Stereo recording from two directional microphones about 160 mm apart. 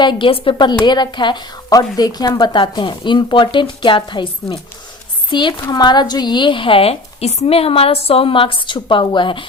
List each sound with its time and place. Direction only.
0.0 s a woman's voice: 30° left (ahead or behind)